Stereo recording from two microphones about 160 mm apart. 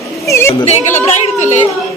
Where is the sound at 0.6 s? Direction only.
45° left (ahead or behind).